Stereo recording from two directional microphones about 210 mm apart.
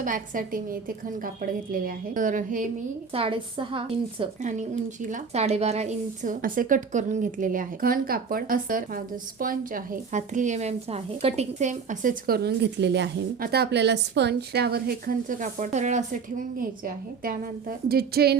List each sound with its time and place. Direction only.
0.0 s a woman's voice: 40° right (ahead or behind)
3.1 s a woman's voice: 25° right (ahead or behind); by 18.3 s 50° right (ahead or behind)